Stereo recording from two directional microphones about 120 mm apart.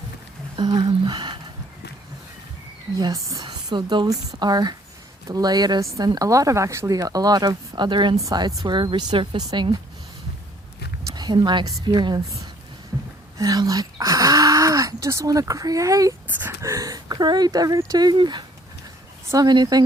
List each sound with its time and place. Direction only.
0.5 s speech: 40° right (ahead or behind)
3.0 s a woman's voice: 30° right (ahead or behind)
11.1 s a woman's voice: 35° right (ahead or behind)
13.4 s a woman's voice: 30° right (ahead or behind)